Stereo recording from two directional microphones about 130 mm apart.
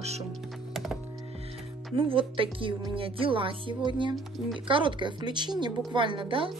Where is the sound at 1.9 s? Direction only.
40° right (ahead or behind).